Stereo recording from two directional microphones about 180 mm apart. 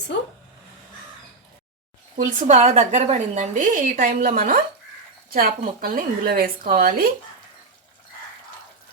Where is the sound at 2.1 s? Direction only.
45° right (ahead or behind).